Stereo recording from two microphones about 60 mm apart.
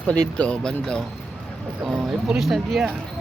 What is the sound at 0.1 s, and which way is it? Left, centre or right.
Speech, left.